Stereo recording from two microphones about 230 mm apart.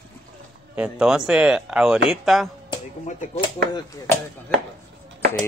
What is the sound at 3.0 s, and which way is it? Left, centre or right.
Speech, left.